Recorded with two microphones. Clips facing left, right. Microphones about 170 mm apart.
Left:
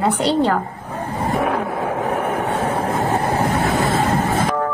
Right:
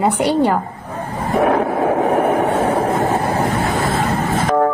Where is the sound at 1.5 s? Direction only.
55° right (ahead or behind).